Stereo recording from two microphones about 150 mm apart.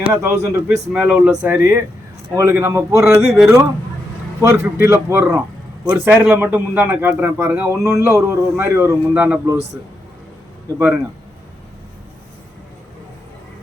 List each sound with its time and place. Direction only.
0.1 s a man's voice: 15° right (ahead or behind)
3.2 s speech: 5° right (ahead or behind)
4.4 s a man's voice: 20° right (ahead or behind)
10.8 s a man's voice: 10° right (ahead or behind)